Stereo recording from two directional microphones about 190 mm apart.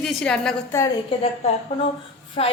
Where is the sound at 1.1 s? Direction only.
25° left (ahead or behind).